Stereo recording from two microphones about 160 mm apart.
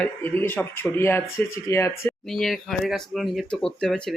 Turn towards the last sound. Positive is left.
turn(degrees=0)  # may be behind; listen again after turning